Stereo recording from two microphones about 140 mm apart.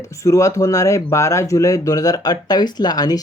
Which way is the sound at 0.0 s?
20° left (ahead or behind).